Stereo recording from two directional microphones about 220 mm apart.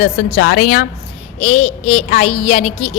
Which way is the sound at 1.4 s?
30° left (ahead or behind).